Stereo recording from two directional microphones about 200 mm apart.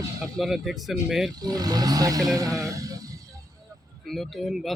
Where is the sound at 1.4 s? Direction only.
20° right (ahead or behind).